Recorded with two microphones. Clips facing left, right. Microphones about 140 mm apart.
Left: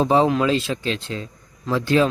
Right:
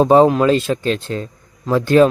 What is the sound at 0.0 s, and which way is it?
Speech, 50° right (ahead or behind).